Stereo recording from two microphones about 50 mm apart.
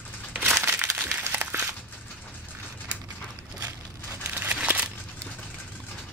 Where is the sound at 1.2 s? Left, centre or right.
Right.